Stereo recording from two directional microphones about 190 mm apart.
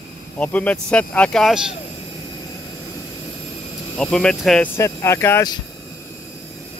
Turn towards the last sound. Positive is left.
turn(degrees=15)  # may be behind; listen again after turning